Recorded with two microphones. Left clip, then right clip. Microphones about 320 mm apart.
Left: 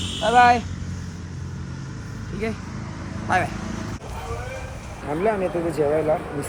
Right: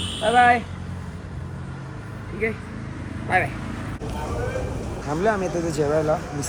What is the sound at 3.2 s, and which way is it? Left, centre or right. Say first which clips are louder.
Speech: even; centre.